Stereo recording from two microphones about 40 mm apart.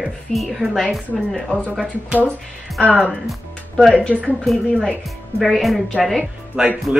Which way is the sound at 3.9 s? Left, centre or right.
Left.